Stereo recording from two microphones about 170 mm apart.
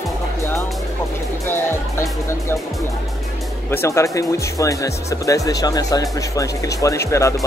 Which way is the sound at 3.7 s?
15° left (ahead or behind).